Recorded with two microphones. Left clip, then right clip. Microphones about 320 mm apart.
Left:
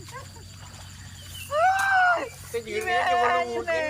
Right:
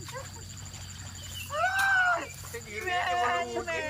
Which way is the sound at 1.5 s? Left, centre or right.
Centre.